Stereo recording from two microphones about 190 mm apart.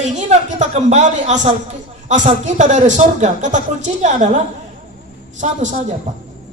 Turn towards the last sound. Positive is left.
turn(degrees=-40)  # may be behind; listen again after turning